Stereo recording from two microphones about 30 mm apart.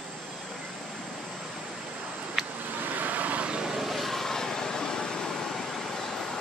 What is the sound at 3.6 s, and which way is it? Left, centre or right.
Vehicle, centre.